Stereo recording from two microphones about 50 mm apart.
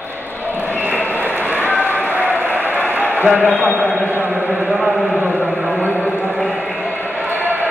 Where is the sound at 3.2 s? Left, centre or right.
Right.